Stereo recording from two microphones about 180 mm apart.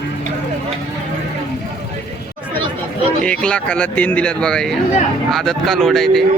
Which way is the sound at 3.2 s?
5° left (ahead or behind).